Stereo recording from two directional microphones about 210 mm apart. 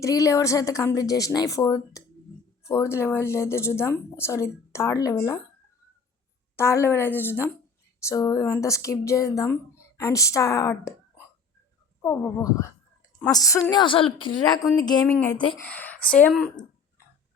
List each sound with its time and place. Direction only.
0.0 s speech: 15° left (ahead or behind)
6.6 s speech: 10° left (ahead or behind)
12.0 s a woman's voice: 15° left (ahead or behind)